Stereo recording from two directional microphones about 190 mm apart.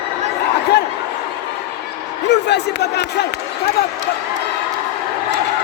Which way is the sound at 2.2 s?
65° left (ahead or behind).